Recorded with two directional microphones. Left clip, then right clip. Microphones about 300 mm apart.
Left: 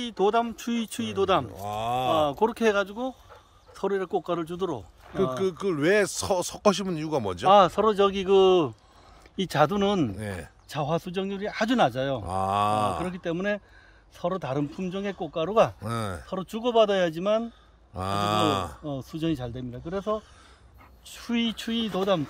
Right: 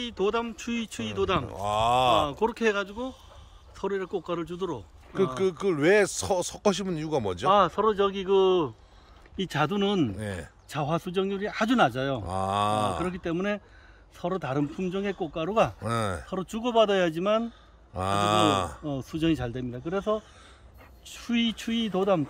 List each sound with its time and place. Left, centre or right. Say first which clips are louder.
0.0 s speech: left 4 dB; left
1.5 s speech: right 5 dB; centre
2.2 s speech: left 2 dB; left
5.1 s speech: even; centre
7.4 s speech: left 4 dB; left
9.4 s speech: left 4 dB; centre